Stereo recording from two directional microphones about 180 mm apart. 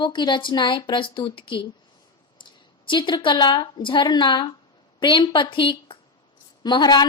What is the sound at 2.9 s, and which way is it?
A woman's voice, 25° left (ahead or behind).